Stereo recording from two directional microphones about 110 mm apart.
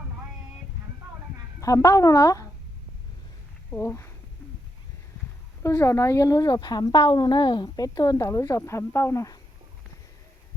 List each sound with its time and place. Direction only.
1.6 s speech: 30° left (ahead or behind)
3.8 s speech: 25° left (ahead or behind)
5.6 s speech: 25° left (ahead or behind)